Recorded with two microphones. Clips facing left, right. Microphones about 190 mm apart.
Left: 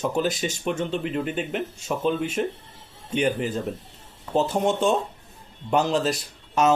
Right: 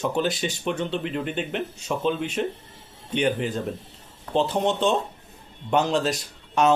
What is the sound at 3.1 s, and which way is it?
Speech, 5° left (ahead or behind).